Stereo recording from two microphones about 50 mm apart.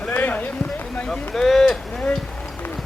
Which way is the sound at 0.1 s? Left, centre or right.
Left.